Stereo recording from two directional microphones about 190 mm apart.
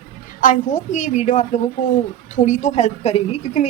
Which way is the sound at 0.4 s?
40° left (ahead or behind).